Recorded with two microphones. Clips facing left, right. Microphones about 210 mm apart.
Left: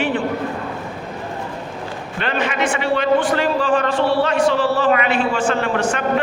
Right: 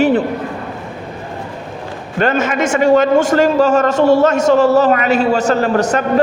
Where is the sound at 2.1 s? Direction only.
45° right (ahead or behind).